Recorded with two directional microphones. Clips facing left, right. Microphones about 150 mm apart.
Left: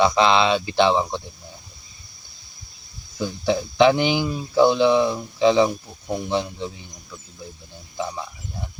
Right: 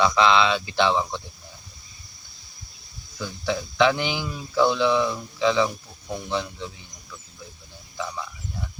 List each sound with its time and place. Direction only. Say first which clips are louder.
0.0 s speech: left 2 dB; 25° left (ahead or behind)
3.2 s speech: left 5 dB; 25° left (ahead or behind)
7.9 s speech: left 3 dB; 25° left (ahead or behind)